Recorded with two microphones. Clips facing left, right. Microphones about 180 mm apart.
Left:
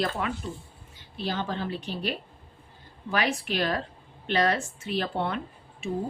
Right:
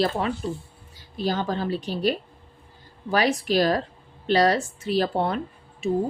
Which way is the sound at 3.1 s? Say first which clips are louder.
Right 6 dB; 35° right (ahead or behind).